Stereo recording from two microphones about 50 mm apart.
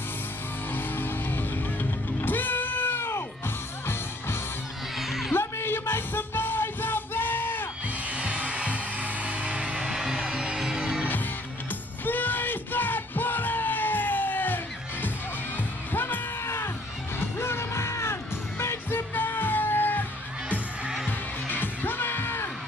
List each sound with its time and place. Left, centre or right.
0.7 s music: left
4.9 s music: centre
5.3 s music: left
8.1 s music: right
12.0 s music: left
18.9 s music: left
20.4 s music: right
21.5 s music: left